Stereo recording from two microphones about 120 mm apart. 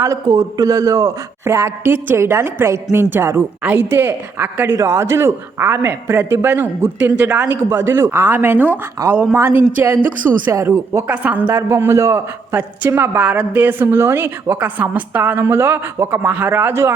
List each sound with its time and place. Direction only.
0.0 s a man's voice: 25° right (ahead or behind)